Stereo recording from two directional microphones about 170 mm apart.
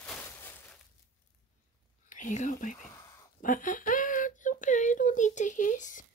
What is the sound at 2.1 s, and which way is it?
Speech, 45° left (ahead or behind).